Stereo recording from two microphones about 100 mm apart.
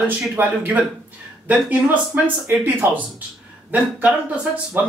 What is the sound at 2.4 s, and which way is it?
Speech, 15° right (ahead or behind).